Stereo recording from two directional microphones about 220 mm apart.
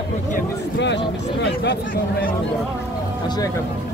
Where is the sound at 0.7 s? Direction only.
55° left (ahead or behind).